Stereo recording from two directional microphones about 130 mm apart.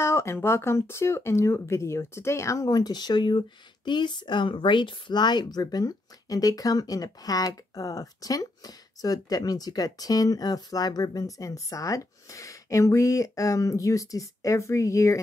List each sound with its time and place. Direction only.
0.0 s speech: 20° left (ahead or behind)